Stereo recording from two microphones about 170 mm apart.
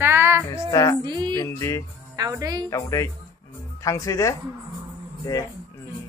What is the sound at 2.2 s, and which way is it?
Speech, 20° right (ahead or behind).